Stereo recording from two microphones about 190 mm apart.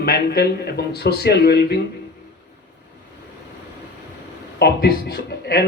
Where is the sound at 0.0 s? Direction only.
55° left (ahead or behind).